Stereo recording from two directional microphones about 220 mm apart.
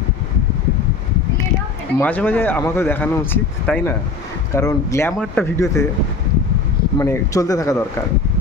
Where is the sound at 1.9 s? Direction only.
5° left (ahead or behind).